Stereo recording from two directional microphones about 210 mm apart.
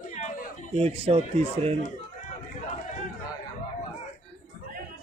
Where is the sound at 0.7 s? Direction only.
30° right (ahead or behind).